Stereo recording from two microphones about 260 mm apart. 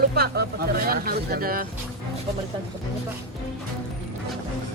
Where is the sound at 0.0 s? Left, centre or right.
Right.